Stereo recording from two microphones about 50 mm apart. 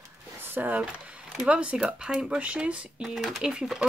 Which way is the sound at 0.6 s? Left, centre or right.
Right.